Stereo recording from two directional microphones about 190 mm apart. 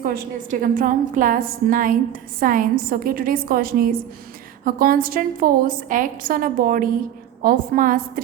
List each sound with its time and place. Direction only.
0.6 s a woman's voice: 45° right (ahead or behind)